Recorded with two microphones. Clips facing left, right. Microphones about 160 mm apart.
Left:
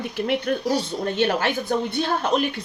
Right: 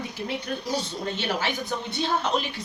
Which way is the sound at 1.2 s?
55° left (ahead or behind).